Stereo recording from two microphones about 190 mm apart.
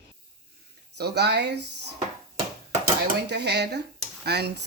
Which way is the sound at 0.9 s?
60° right (ahead or behind).